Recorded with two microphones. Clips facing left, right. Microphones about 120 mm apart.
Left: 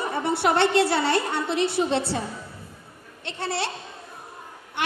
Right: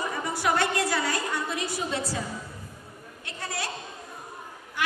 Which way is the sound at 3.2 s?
30° left (ahead or behind).